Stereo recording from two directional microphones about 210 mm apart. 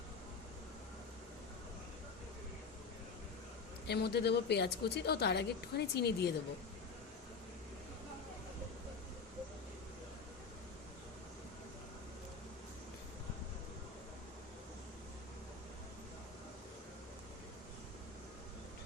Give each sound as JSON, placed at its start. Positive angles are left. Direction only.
{"t": 3.8, "sound": "a woman's voice", "side_deg": 50}